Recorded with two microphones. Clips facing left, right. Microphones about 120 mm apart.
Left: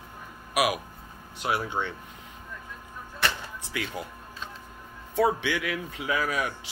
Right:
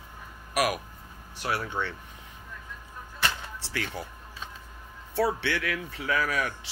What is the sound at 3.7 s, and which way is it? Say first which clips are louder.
Speech: left 1 dB; 10° left (ahead or behind).